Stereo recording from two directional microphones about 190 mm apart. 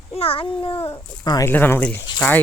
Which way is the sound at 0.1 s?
30° left (ahead or behind).